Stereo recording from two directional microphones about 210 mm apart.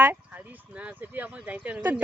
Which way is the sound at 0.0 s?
10° right (ahead or behind).